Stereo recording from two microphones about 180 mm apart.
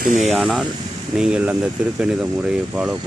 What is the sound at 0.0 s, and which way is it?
Speech, 40° right (ahead or behind).